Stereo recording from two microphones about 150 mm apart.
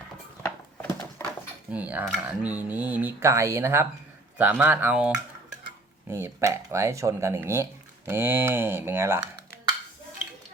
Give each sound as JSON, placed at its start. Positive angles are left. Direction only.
{"t": 1.2, "sound": "a sound", "side_deg": 15}
{"t": 1.7, "sound": "speech", "side_deg": -10}
{"t": 6.1, "sound": "speech", "side_deg": -20}